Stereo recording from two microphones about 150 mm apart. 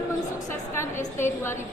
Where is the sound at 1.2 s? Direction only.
15° left (ahead or behind).